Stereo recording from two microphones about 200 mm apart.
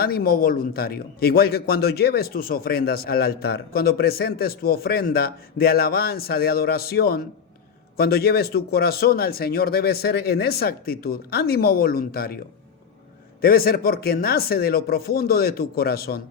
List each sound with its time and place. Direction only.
0.0 s a man's voice: 50° left (ahead or behind)
13.4 s a man's voice: 45° left (ahead or behind)